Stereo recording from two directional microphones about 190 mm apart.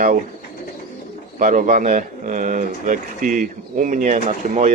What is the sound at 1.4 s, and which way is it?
Speech, 45° right (ahead or behind).